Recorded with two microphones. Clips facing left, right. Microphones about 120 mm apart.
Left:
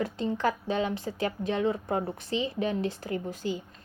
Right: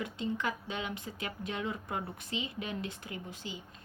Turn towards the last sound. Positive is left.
turn(degrees=45)  # may be behind; listen again after turning